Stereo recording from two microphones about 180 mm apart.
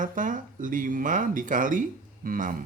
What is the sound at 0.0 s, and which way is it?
Speech, 45° right (ahead or behind).